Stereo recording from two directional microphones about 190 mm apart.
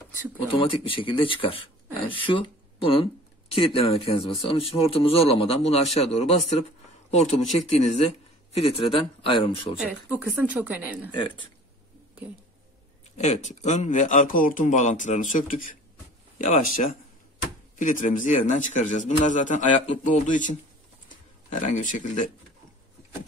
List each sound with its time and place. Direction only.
0.5 s speech: 25° left (ahead or behind)
10.4 s a woman's voice: 5° right (ahead or behind)
11.1 s speech: 25° left (ahead or behind)
13.2 s speech: 35° left (ahead or behind)